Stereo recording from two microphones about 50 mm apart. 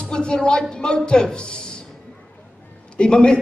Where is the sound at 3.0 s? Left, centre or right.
Centre.